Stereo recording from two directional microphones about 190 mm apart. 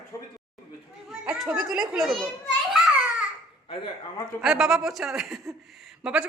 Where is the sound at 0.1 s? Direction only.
15° left (ahead or behind).